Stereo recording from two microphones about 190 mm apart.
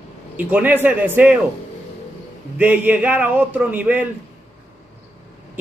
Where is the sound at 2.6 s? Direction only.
10° right (ahead or behind).